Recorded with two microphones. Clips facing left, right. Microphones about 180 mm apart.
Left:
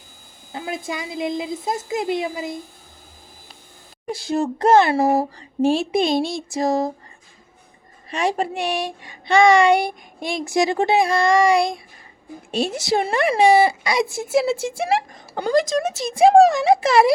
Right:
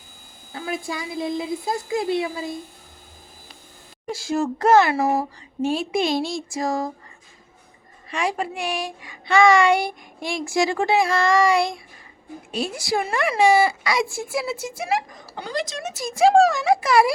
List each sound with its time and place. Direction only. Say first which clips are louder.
0.5 s a woman's voice: left 1 dB; 20° left (ahead or behind)
4.5 s a woman's voice: left 2 dB; 30° left (ahead or behind)
6.2 s a sound: left 2 dB; 60° left (ahead or behind)
6.6 s a woman's voice: left 5 dB; 20° left (ahead or behind)
8.1 s a woman's voice: left 3 dB; 25° left (ahead or behind)
13.9 s a woman's voice: left 5 dB; 20° left (ahead or behind)
15.4 s speech: left 10 dB; 45° left (ahead or behind)
15.9 s a woman's voice: left 1 dB; 25° left (ahead or behind)